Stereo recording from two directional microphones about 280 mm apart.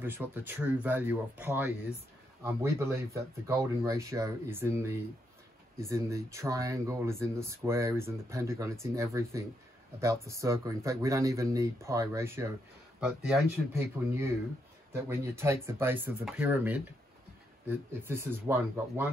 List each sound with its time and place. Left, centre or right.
0.0 s speech: centre